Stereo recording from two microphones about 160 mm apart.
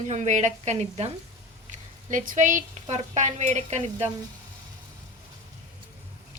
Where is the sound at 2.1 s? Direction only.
55° right (ahead or behind).